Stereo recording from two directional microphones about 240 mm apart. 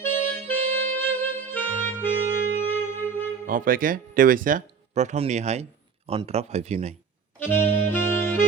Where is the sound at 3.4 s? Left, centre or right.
Right.